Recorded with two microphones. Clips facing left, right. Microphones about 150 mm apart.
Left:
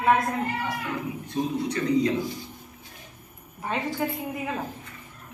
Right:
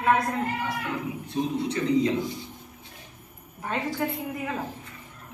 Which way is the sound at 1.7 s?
25° right (ahead or behind).